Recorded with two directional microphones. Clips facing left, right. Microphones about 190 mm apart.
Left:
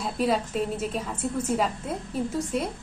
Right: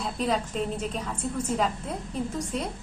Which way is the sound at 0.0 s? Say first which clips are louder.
Left 2 dB; 5° left (ahead or behind).